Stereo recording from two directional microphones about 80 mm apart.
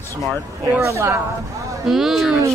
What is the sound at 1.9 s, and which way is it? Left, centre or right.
Speech, centre.